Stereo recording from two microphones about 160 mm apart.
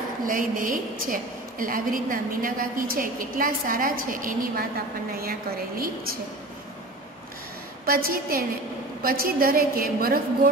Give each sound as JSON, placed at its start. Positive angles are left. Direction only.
{"t": 0.2, "sound": "a woman's voice", "side_deg": -60}
{"t": 7.8, "sound": "a woman's voice", "side_deg": -65}